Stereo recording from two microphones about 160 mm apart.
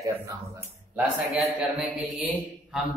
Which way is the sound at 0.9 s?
10° right (ahead or behind).